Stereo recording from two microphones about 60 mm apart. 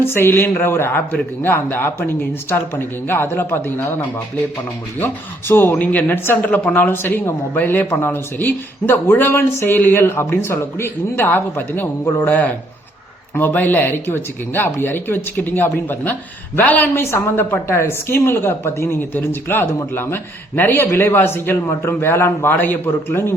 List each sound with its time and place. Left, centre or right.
0.0 s speech: left
9.4 s a woman's voice: left
9.7 s a woman's voice: left
16.9 s a woman's voice: left
22.5 s speech: left